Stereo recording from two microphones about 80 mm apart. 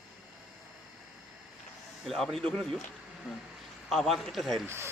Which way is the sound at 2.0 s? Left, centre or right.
Centre.